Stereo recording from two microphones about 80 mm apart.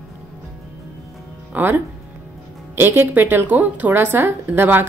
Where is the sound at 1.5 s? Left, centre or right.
Right.